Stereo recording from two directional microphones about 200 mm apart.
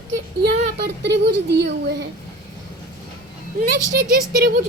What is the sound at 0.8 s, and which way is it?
Speech, 55° right (ahead or behind).